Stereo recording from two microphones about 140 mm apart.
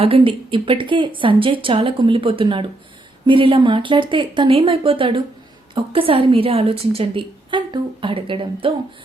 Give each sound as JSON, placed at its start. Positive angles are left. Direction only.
{"t": 0.0, "sound": "a woman's voice", "side_deg": -40}